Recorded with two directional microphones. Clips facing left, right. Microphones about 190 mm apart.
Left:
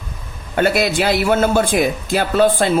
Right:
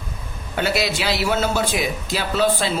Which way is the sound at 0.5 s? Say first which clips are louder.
Left 6 dB; 50° left (ahead or behind).